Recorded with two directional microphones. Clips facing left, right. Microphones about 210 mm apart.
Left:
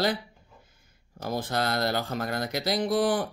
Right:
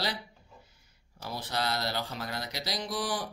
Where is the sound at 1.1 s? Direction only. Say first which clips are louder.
Left 6 dB; 50° left (ahead or behind).